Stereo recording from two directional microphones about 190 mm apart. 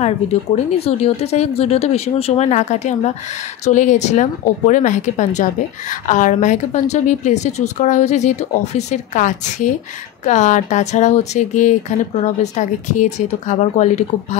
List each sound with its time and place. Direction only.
0.0 s a woman's voice: 35° left (ahead or behind)